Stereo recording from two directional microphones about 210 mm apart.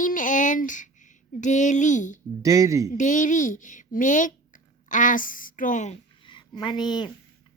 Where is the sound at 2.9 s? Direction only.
35° left (ahead or behind).